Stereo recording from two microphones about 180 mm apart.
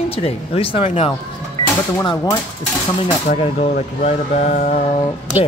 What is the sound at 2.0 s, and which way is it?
Speech, 20° left (ahead or behind).